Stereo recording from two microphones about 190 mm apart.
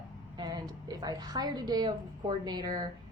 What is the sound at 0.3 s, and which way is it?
A woman's voice, 20° right (ahead or behind).